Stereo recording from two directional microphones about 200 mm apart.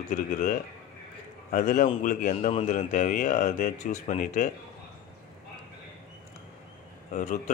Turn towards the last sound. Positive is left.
turn(degrees=35)  # may be behind; listen again after turning